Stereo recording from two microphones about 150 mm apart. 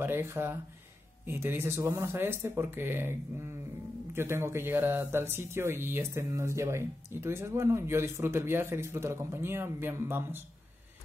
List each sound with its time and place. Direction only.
0.0 s speech: 15° right (ahead or behind)